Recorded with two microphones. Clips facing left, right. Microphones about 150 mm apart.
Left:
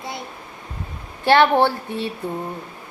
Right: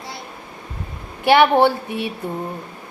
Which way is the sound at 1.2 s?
15° right (ahead or behind).